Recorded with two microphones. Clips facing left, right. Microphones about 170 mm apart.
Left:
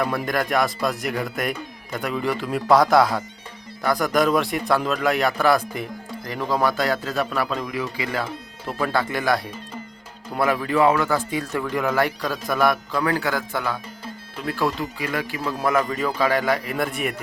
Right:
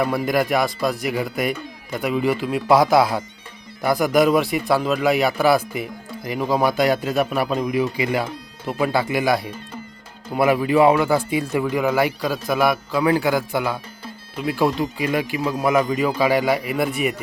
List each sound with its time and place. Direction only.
0.0 s speech: 5° right (ahead or behind)